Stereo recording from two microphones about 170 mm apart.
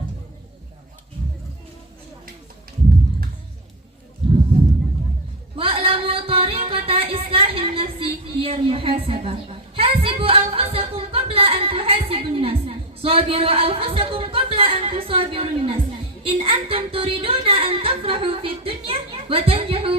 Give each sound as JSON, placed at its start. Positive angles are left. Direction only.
{"t": 5.5, "sound": "music", "side_deg": -35}
{"t": 16.2, "sound": "speech", "side_deg": -35}